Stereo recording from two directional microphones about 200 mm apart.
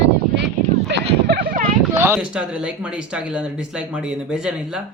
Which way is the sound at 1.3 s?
45° right (ahead or behind).